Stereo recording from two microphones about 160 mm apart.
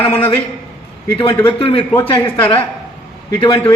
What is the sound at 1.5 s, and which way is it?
A man's voice, 35° left (ahead or behind).